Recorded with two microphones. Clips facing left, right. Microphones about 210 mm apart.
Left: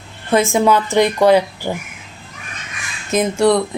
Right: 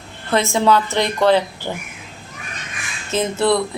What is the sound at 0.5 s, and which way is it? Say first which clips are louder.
Speech: left 1 dB; 15° left (ahead or behind).